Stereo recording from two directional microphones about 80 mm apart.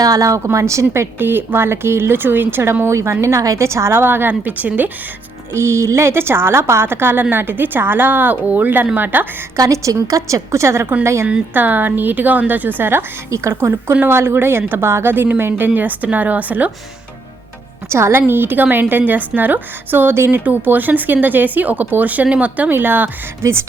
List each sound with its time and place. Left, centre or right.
0.0 s a woman's voice: right
5.5 s a woman's voice: right
9.6 s a woman's voice: right
11.5 s a woman's voice: right
17.8 s a woman's voice: right